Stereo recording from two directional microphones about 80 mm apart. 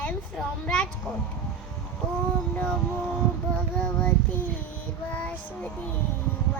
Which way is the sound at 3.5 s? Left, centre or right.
Centre.